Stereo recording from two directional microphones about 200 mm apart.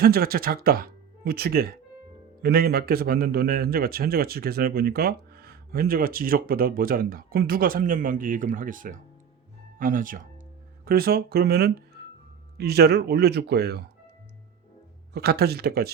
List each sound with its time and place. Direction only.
0.0 s a man's voice: 50° right (ahead or behind)
15.1 s a man's voice: 50° right (ahead or behind)